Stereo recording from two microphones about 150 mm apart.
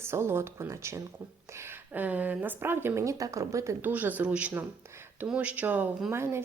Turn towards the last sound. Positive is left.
turn(degrees=-15)  # may be behind; listen again after turning